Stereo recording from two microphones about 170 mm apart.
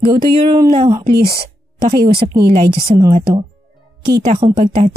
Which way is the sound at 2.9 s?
25° right (ahead or behind).